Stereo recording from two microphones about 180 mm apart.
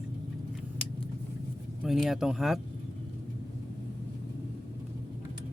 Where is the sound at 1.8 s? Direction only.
Centre (ahead or behind).